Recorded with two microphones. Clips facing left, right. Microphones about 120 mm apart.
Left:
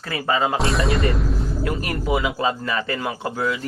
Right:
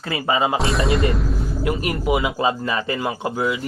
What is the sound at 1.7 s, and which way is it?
A man's voice, 15° right (ahead or behind).